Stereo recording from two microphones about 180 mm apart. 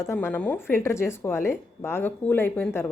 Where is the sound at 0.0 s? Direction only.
15° left (ahead or behind).